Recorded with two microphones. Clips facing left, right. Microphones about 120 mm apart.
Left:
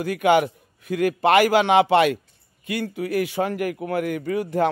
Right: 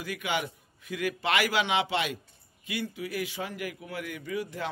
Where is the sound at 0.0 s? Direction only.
55° left (ahead or behind).